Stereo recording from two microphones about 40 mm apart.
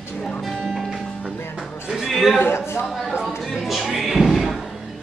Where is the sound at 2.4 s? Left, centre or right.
Left.